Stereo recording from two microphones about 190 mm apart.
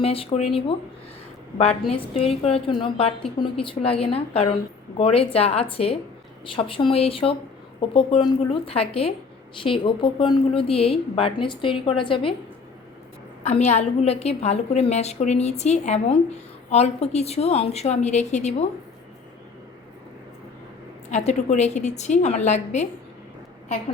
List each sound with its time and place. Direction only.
0.0 s a woman's voice: 30° left (ahead or behind)
1.9 s a woman's voice: 30° left (ahead or behind)
13.4 s a woman's voice: 35° left (ahead or behind)
21.1 s a woman's voice: 35° left (ahead or behind)